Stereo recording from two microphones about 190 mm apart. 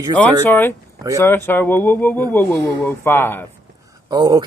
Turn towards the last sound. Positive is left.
turn(degrees=-20)  # may be behind; listen again after turning